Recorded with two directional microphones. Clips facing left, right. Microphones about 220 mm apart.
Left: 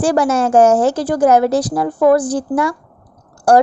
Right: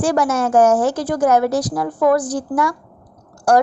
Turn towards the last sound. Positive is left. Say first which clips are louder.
# left 3 dB
turn(degrees=30)  # may be behind; listen again after turning